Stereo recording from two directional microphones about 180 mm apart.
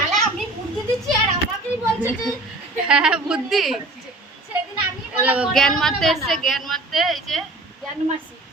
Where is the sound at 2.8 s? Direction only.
5° right (ahead or behind).